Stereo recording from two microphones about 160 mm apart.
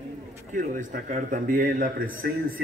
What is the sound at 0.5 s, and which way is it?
A man's voice, 55° right (ahead or behind).